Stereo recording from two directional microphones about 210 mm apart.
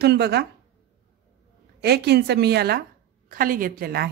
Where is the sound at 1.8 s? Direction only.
50° right (ahead or behind).